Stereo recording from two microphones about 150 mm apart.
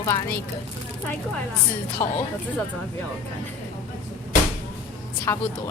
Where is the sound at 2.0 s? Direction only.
55° left (ahead or behind).